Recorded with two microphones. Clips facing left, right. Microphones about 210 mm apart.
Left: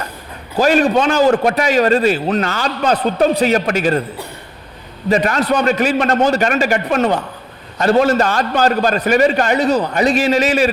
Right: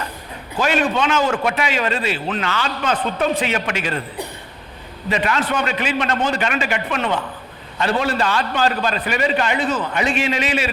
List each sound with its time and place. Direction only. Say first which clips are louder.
0.5 s a man's voice: left 6 dB; 40° left (ahead or behind)
5.0 s a man's voice: left 6 dB; 40° left (ahead or behind)